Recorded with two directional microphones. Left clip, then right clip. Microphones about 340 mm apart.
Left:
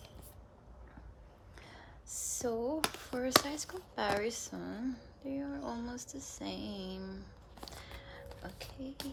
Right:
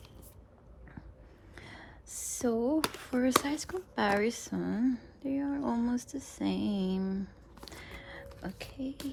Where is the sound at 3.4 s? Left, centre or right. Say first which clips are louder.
Right 6 dB; right.